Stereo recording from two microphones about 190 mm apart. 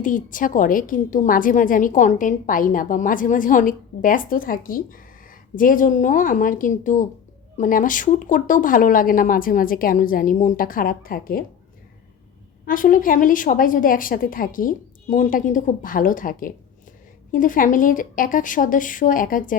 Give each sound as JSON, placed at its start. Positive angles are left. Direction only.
{"t": 0.0, "sound": "a woman's voice", "side_deg": 45}
{"t": 12.6, "sound": "a woman's voice", "side_deg": 45}